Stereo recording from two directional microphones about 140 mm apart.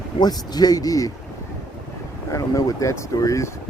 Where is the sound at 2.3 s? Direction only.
25° left (ahead or behind).